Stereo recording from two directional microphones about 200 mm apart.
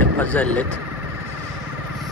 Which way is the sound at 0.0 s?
5° left (ahead or behind).